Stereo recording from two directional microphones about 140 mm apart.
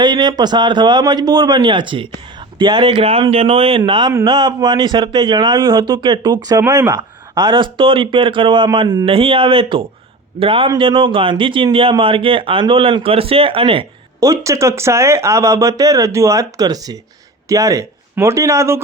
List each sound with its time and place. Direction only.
0.0 s a man's voice: 30° right (ahead or behind)
14.2 s speech: 25° right (ahead or behind)